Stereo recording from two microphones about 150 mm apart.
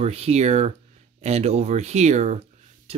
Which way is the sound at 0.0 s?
45° right (ahead or behind).